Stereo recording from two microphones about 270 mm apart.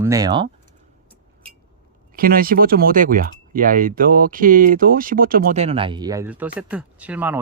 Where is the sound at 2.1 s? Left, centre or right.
Right.